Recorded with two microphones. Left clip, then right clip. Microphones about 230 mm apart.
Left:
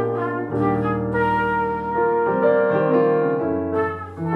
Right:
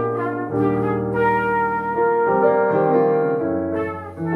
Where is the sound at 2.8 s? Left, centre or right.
Right.